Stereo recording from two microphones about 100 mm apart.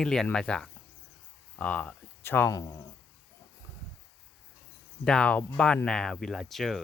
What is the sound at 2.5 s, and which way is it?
Speech, 35° left (ahead or behind).